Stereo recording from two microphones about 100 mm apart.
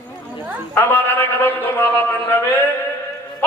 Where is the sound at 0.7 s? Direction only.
20° left (ahead or behind).